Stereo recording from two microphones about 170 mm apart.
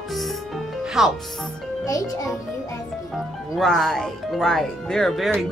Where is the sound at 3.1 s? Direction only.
Centre (ahead or behind).